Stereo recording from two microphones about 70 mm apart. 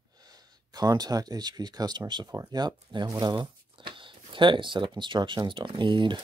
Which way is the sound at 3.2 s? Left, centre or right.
Right.